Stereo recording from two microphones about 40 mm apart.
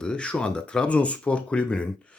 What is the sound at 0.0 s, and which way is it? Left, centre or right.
Speech, left.